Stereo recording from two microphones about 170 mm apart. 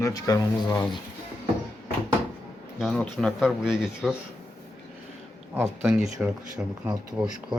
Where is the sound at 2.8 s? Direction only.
5° left (ahead or behind).